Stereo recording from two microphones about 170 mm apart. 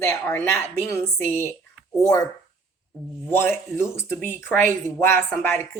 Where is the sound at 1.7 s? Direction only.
Centre (ahead or behind).